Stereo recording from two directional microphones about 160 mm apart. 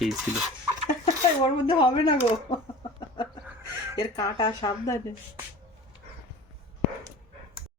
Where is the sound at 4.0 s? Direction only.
25° left (ahead or behind).